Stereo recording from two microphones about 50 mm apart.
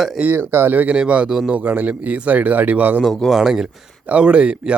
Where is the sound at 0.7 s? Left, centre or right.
Right.